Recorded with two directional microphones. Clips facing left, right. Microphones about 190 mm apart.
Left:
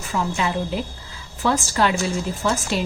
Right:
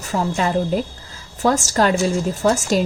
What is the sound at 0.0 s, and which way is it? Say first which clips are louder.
A woman's voice: right 3 dB; 40° right (ahead or behind).